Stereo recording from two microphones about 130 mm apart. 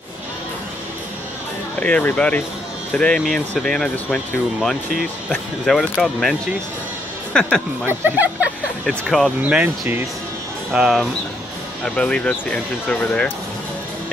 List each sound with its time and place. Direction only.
1.8 s speech: 10° left (ahead or behind)
7.3 s speech: 5° left (ahead or behind)
7.8 s speech: 15° right (ahead or behind)
8.8 s speech: 5° left (ahead or behind)
9.4 s speech: 10° right (ahead or behind)
10.7 s speech: 5° right (ahead or behind)
11.8 s speech: 5° left (ahead or behind)